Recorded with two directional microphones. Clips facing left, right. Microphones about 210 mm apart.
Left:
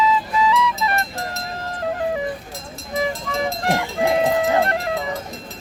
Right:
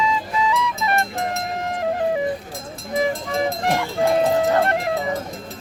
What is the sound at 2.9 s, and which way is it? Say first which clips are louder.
Vehicle: right 2 dB; 50° right (ahead or behind).